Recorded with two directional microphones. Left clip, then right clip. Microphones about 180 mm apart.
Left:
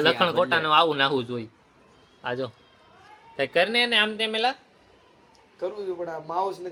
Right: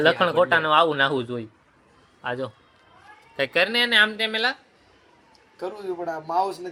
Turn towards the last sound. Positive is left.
turn(degrees=-60)  # may be behind; listen again after turning